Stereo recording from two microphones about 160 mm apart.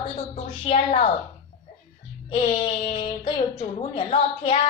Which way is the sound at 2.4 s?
40° left (ahead or behind).